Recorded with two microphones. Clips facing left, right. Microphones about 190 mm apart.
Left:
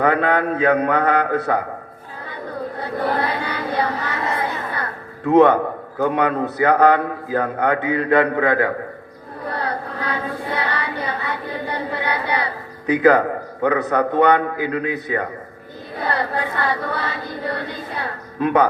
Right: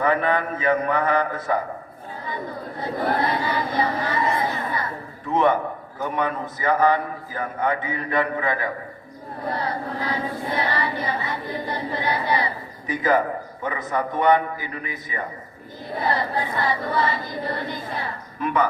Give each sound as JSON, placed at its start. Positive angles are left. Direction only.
{"t": 0.0, "sound": "music", "side_deg": 65}
{"t": 3.2, "sound": "a sound", "side_deg": 60}
{"t": 6.0, "sound": "music", "side_deg": 65}